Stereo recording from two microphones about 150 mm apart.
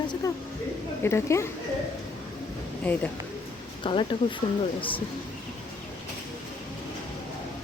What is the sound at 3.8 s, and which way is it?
Speech, 35° left (ahead or behind).